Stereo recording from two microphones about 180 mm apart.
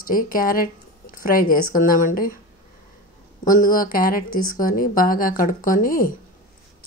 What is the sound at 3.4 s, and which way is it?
Speech, 50° left (ahead or behind).